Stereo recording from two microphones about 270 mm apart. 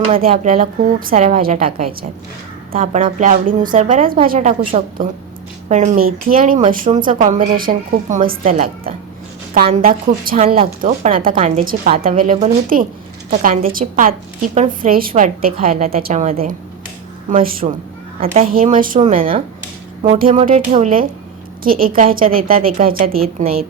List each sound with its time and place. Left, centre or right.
0.2 s a woman's voice: right